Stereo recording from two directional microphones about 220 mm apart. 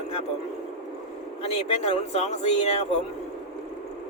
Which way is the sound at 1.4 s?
25° left (ahead or behind).